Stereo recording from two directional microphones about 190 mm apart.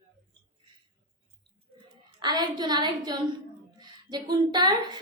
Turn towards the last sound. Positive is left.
turn(degrees=-20)  # may be behind; listen again after turning